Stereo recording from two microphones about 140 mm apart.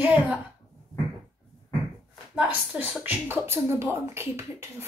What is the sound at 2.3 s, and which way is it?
A woman's voice, 10° right (ahead or behind).